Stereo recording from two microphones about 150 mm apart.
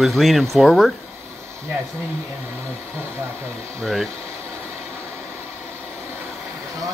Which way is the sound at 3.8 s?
Centre (ahead or behind).